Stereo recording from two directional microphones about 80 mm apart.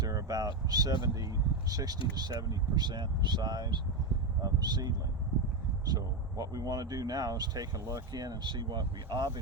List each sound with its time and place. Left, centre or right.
0.0 s speech: right